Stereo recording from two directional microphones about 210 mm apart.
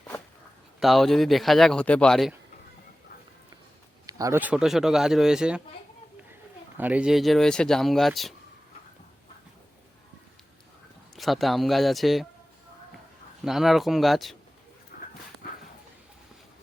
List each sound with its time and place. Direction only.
0.8 s speech: centre (ahead or behind)
4.0 s speech: 15° right (ahead or behind)
6.7 s speech: 5° right (ahead or behind)
11.2 s speech: centre (ahead or behind)
13.4 s speech: centre (ahead or behind)
14.9 s dog: 40° left (ahead or behind)